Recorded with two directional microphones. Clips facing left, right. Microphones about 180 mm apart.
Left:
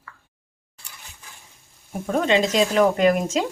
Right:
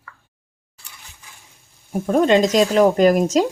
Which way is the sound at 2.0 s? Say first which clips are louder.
Right 5 dB; 35° right (ahead or behind).